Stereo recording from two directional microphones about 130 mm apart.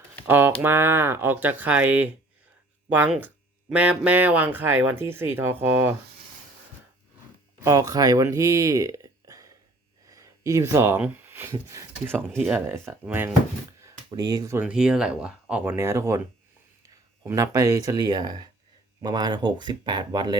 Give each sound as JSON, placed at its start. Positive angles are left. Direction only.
{"t": 0.3, "sound": "speech", "side_deg": -15}
{"t": 3.2, "sound": "speech", "side_deg": -15}
{"t": 7.6, "sound": "speech", "side_deg": -25}
{"t": 10.1, "sound": "a sound", "side_deg": -25}
{"t": 11.0, "sound": "speech", "side_deg": -15}
{"t": 13.8, "sound": "speech", "side_deg": -30}
{"t": 14.6, "sound": "speech", "side_deg": -5}
{"t": 15.7, "sound": "speech", "side_deg": -20}